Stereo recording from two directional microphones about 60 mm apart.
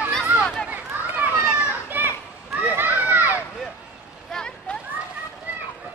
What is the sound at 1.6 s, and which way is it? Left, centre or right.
Children playing, right.